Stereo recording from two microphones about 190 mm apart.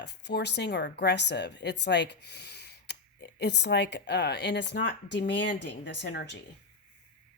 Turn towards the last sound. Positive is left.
turn(degrees=65)  # may be behind; listen again after turning